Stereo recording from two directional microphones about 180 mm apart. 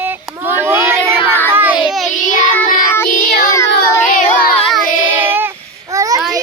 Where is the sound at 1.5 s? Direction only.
10° right (ahead or behind).